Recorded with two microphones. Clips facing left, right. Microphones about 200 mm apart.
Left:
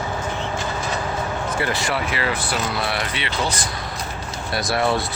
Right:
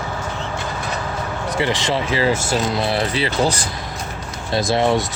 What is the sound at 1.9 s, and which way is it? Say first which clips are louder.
Speech: right 5 dB; 35° right (ahead or behind).